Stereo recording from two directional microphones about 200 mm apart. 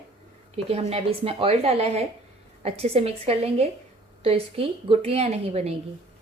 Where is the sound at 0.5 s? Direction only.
30° right (ahead or behind).